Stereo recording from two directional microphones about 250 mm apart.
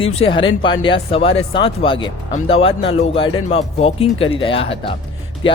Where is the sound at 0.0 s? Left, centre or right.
Left.